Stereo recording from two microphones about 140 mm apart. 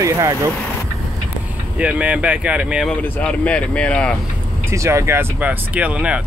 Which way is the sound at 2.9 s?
10° left (ahead or behind).